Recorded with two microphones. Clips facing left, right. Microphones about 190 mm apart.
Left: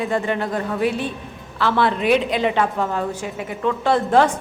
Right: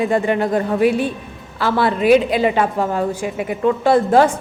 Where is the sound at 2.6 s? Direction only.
40° right (ahead or behind).